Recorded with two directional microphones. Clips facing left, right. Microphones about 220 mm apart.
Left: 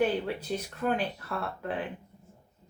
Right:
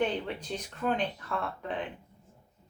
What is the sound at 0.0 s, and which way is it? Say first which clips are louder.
Speech: left 3 dB; 5° left (ahead or behind).